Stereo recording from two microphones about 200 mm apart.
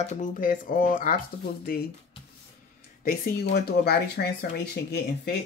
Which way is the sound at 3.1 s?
55° left (ahead or behind).